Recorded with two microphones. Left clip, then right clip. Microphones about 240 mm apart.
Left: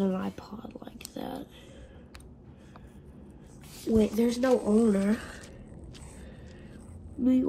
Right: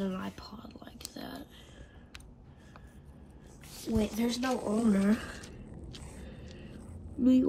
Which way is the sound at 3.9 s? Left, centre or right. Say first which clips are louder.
Left 7 dB; right.